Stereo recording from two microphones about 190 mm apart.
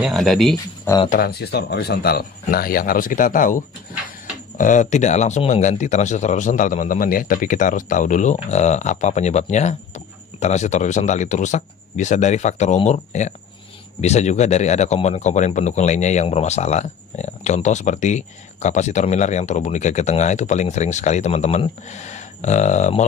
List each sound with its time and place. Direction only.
0.0 s speech: centre (ahead or behind)
1.1 s speech: 55° left (ahead or behind); by 23.0 s 40° left (ahead or behind)